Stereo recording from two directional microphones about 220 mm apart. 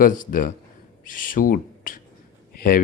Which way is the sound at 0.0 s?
40° left (ahead or behind).